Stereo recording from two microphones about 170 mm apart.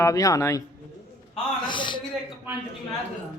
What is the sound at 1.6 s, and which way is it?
Speech, 30° left (ahead or behind).